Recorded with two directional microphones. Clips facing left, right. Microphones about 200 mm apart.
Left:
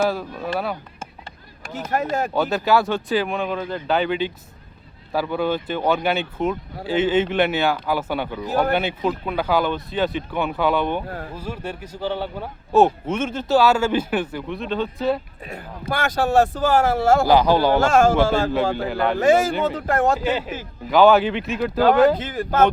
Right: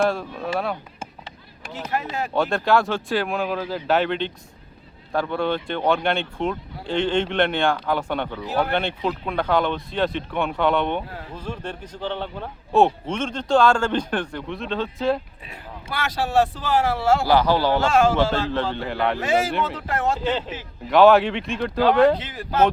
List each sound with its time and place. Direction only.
0.0 s speech: centre (ahead or behind)
1.9 s a man's voice: 45° left (ahead or behind)
2.3 s speech: 5° left (ahead or behind)
8.4 s a man's voice: 45° left (ahead or behind)
8.7 s a man's voice: 5° left (ahead or behind)
15.4 s a man's voice: 50° left (ahead or behind)
17.2 s a man's voice: 15° left (ahead or behind)
17.7 s a man's voice: 45° left (ahead or behind)
18.8 s speech: centre (ahead or behind)
19.2 s a man's voice: 45° left (ahead or behind)
20.1 s a man's voice: 10° left (ahead or behind)
22.2 s a man's voice: 50° left (ahead or behind)